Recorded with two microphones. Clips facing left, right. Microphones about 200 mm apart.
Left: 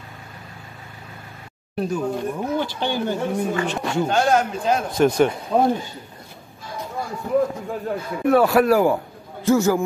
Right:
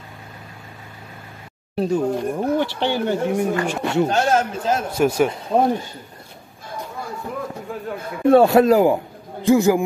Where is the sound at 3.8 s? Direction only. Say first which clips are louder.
Right 1 dB; 25° right (ahead or behind).